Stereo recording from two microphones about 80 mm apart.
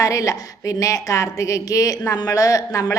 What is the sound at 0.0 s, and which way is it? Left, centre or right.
A woman's voice, left.